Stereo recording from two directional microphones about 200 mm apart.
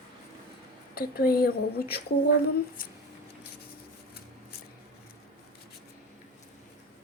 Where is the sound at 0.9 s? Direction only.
50° left (ahead or behind).